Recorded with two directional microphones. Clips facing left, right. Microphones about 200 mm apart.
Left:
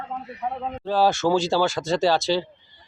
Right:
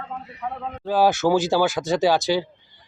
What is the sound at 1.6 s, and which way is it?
Speech, centre (ahead or behind).